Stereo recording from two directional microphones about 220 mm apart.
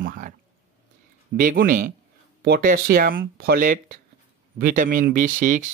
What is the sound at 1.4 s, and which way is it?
Speech, 40° right (ahead or behind).